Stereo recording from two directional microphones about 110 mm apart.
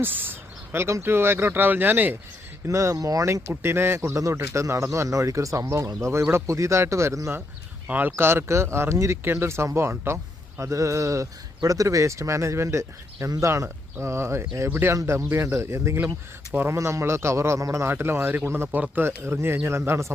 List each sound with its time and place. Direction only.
0.0 s a man's voice: 20° right (ahead or behind)
2.6 s a man's voice: 30° right (ahead or behind)
7.9 s a man's voice: 15° right (ahead or behind)